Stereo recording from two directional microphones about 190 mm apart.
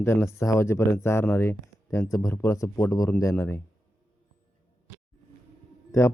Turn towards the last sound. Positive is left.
turn(degrees=15)  # may be behind; listen again after turning